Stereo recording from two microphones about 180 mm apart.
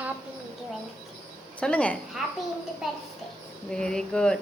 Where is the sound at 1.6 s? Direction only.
5° left (ahead or behind).